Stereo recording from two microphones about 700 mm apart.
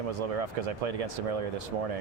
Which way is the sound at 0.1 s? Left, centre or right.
Right.